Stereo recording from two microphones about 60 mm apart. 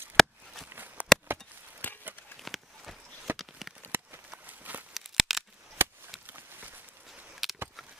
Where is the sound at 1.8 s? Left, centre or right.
Left.